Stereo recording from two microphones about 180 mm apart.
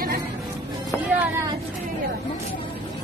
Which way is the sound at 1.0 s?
10° right (ahead or behind).